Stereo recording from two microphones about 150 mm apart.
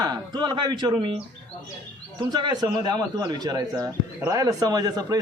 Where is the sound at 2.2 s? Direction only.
30° right (ahead or behind).